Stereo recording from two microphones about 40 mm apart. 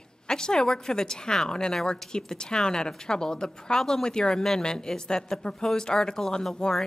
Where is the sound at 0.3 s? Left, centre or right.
Centre.